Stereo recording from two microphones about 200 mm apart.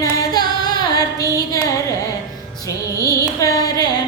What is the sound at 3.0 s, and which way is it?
Carnatic music, 15° left (ahead or behind).